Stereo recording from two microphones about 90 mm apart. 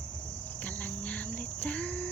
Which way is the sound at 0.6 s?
15° left (ahead or behind).